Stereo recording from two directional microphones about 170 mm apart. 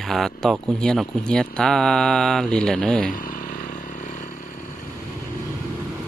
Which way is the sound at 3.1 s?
55° left (ahead or behind).